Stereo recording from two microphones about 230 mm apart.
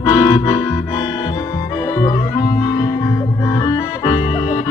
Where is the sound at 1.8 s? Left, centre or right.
Centre.